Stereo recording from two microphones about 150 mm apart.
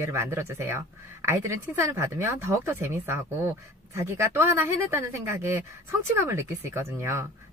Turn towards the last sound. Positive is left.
turn(degrees=-15)  # may be behind; listen again after turning